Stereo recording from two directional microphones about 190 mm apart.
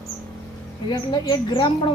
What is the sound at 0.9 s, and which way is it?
Speech, 20° left (ahead or behind).